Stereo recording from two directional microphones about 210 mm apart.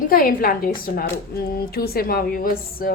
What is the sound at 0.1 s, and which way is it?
A woman's voice, 45° left (ahead or behind).